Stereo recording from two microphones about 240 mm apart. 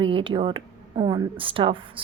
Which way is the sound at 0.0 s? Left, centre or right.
Right.